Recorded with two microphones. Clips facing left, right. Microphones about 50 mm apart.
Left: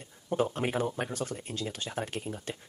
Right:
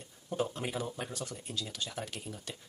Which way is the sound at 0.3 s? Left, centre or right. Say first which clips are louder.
Left 5 dB; left.